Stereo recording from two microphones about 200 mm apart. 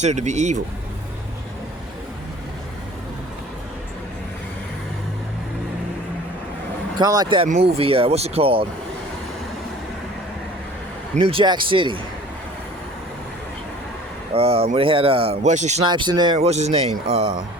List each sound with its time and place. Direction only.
0.0 s speech: 35° right (ahead or behind)
7.0 s speech: 20° right (ahead or behind)
11.1 s speech: 25° right (ahead or behind)
14.3 s speech: 30° right (ahead or behind)
15.8 s speech: 25° right (ahead or behind)